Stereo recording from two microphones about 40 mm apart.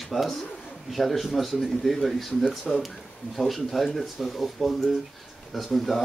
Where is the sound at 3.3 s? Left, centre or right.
Centre.